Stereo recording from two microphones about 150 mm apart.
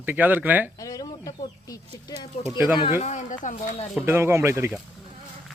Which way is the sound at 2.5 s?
15° right (ahead or behind).